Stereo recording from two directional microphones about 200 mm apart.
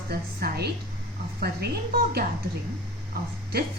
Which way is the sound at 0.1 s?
50° right (ahead or behind).